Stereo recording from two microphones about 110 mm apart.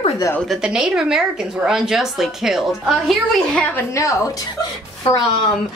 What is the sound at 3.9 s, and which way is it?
Speech, 30° left (ahead or behind).